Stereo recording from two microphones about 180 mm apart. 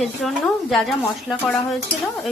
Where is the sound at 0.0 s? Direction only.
Centre (ahead or behind).